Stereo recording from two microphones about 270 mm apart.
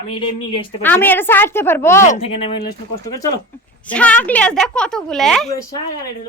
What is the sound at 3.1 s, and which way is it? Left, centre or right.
A woman's voice, centre.